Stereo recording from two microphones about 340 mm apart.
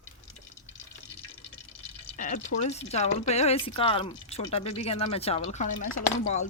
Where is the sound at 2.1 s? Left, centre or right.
Left.